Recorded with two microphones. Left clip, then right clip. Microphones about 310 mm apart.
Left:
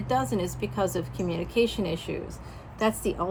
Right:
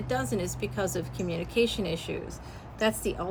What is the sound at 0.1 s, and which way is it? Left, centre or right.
A woman's voice, centre.